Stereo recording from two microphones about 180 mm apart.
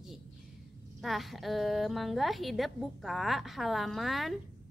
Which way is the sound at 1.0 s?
Centre (ahead or behind).